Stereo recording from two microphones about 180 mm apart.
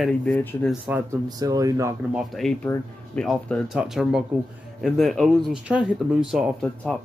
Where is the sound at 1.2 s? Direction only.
20° right (ahead or behind).